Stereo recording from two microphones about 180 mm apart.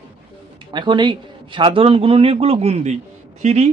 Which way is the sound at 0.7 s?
25° right (ahead or behind).